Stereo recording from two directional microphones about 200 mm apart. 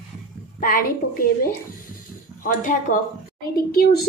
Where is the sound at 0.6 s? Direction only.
40° left (ahead or behind).